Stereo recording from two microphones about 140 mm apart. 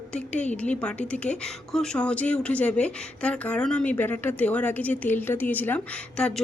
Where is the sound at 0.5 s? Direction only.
10° left (ahead or behind).